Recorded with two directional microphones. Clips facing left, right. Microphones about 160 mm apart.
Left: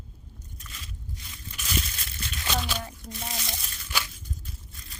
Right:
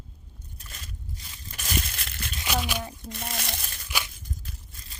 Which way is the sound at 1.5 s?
50° right (ahead or behind).